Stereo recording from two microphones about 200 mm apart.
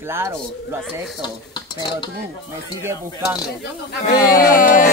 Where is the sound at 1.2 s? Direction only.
25° left (ahead or behind).